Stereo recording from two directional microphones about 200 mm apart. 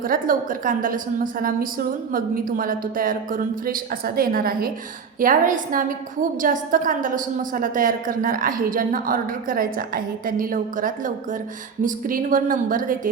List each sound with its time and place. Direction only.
0.0 s a woman's voice: 45° right (ahead or behind)